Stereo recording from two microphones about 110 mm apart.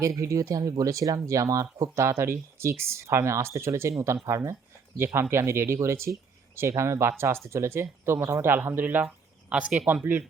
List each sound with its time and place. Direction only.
0.0 s speech: 30° right (ahead or behind)